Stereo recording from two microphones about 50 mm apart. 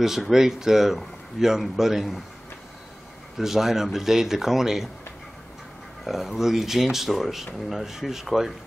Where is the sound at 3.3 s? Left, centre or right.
Centre.